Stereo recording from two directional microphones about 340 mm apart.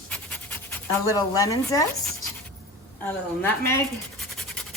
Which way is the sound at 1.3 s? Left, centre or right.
Centre.